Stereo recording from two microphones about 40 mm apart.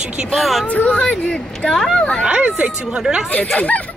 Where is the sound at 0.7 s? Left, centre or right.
Left.